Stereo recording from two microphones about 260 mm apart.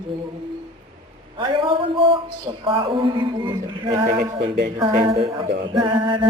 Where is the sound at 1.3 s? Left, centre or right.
Centre.